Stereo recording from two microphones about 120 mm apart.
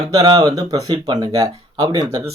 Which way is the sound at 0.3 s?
30° right (ahead or behind).